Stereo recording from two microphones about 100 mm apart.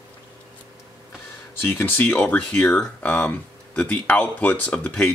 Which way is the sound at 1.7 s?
20° left (ahead or behind).